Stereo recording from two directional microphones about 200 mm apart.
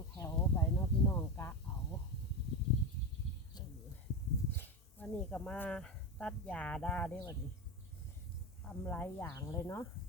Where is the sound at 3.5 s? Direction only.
20° left (ahead or behind).